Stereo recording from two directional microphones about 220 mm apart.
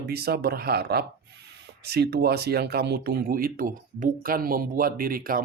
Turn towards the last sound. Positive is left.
turn(degrees=-40)  # may be behind; listen again after turning